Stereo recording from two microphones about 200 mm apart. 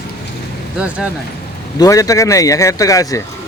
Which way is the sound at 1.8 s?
15° left (ahead or behind).